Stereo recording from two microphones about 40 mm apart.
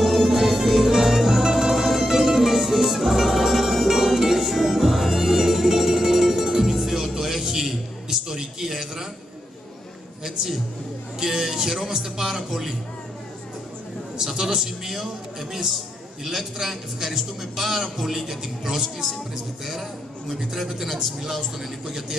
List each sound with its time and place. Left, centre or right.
0.0 s music: centre
10.2 s a sound: centre
11.1 s music: centre
14.5 s a man's voice: centre